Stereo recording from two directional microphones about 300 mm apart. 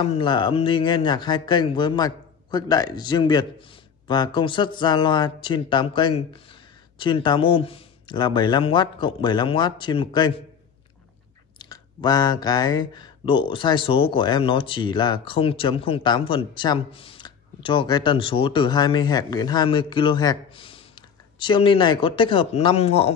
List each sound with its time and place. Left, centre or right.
0.0 s speech: centre
11.5 s speech: centre